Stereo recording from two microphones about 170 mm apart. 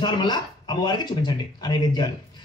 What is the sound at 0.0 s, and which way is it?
A man's voice, 25° left (ahead or behind).